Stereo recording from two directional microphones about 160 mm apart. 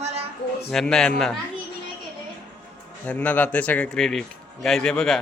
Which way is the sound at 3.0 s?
10° left (ahead or behind).